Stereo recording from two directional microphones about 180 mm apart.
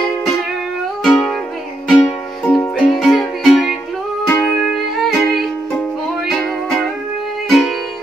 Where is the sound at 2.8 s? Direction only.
Centre (ahead or behind).